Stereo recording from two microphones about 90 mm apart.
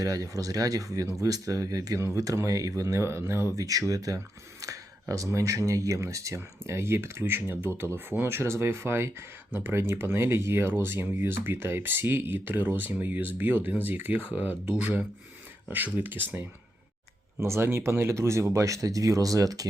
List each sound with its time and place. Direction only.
0.0 s speech: 40° right (ahead or behind)